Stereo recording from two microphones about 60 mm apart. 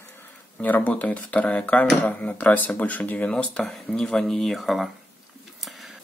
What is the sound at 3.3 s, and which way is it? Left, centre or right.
Speech, centre.